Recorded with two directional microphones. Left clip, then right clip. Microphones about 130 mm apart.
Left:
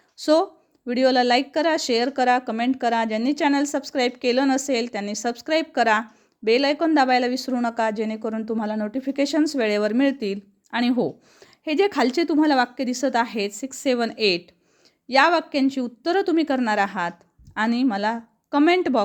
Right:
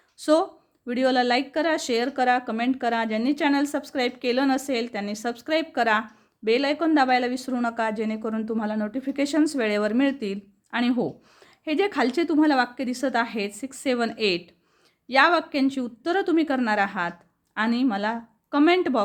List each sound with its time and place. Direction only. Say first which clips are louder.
0.2 s speech: left 2 dB; 30° left (ahead or behind)